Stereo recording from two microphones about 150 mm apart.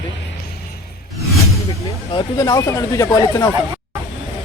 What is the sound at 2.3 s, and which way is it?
Speech, 25° left (ahead or behind).